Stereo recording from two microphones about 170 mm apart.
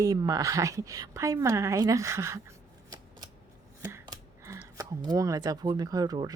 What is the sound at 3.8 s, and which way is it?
Speech, 20° right (ahead or behind).